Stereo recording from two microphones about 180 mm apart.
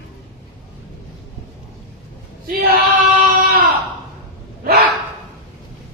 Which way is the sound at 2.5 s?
55° right (ahead or behind).